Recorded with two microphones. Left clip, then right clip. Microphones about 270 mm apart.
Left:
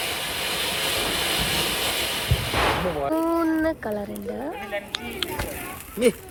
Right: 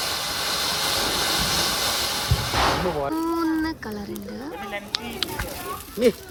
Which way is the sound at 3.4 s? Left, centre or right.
Centre.